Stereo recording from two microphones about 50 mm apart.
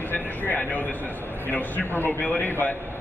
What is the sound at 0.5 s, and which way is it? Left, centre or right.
A man's voice, left.